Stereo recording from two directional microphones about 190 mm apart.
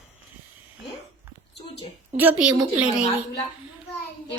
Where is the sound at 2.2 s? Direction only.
10° right (ahead or behind).